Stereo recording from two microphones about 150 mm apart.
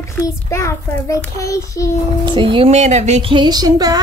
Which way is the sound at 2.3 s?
35° right (ahead or behind).